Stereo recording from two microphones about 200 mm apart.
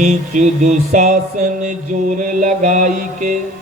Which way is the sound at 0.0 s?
35° right (ahead or behind).